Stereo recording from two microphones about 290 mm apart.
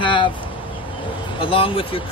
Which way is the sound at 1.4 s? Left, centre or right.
Centre.